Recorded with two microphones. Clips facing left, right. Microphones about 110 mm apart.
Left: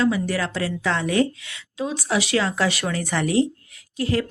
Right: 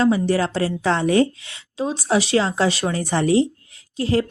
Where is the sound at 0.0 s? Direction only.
30° right (ahead or behind).